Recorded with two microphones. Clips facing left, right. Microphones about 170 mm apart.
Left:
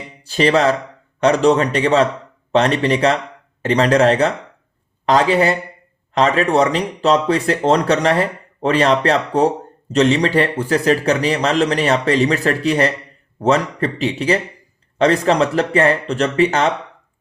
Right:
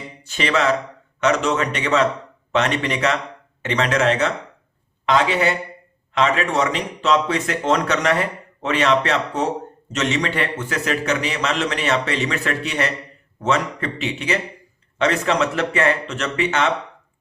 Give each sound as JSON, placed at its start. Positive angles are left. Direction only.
{"t": 0.2, "sound": "speech", "side_deg": 35}